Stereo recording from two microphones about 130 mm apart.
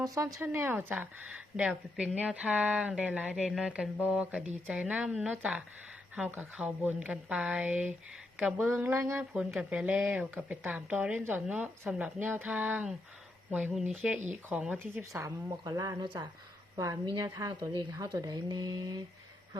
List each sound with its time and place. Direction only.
0.0 s speech: 25° right (ahead or behind)
9.3 s speech: 5° right (ahead or behind)
15.2 s a woman's voice: 25° right (ahead or behind)
17.7 s speech: 35° right (ahead or behind)